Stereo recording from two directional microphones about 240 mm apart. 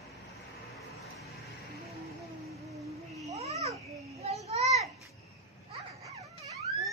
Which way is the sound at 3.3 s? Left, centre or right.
Right.